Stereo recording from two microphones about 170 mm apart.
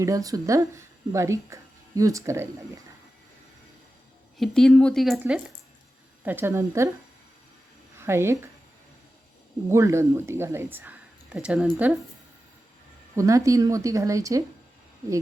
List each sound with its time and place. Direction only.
0.0 s speech: 20° right (ahead or behind)
4.4 s speech: 5° left (ahead or behind)
6.2 s a woman's voice: 15° right (ahead or behind)
7.9 s speech: 15° right (ahead or behind)
9.6 s a woman's voice: 15° right (ahead or behind)
13.1 s speech: 20° right (ahead or behind)